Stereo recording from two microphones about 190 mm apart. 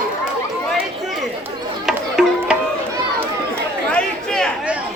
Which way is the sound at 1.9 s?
Centre (ahead or behind).